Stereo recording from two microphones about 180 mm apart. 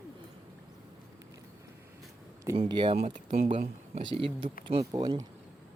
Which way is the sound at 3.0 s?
45° right (ahead or behind).